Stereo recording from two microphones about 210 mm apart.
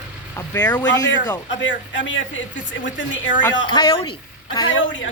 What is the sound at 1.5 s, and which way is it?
Speech, 60° left (ahead or behind).